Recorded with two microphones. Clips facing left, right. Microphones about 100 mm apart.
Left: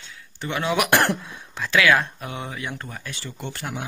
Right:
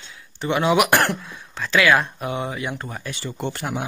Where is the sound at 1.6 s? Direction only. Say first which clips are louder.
Right 1 dB; centre (ahead or behind).